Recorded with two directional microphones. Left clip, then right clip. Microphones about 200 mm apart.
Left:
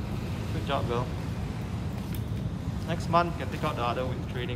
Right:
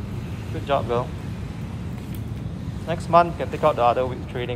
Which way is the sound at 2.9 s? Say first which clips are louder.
Right 9 dB; 10° left (ahead or behind).